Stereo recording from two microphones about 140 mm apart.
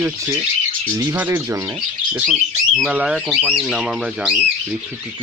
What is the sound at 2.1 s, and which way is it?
Speech, 5° right (ahead or behind).